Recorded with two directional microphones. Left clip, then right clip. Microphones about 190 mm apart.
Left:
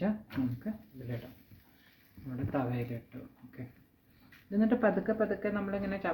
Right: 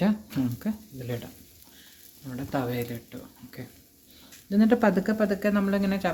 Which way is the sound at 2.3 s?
40° right (ahead or behind).